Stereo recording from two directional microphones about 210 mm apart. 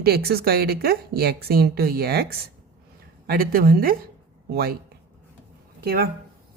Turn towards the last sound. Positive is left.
turn(degrees=-45)  # may be behind; listen again after turning